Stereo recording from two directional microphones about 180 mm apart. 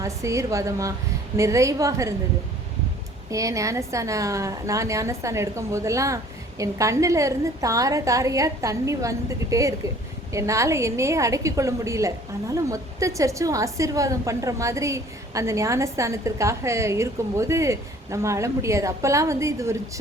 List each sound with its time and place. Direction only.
0.0 s a woman's voice: 15° right (ahead or behind)
3.2 s a woman's voice: 15° right (ahead or behind)